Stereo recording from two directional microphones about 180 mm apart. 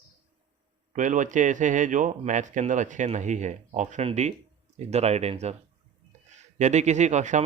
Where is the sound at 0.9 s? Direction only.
45° right (ahead or behind).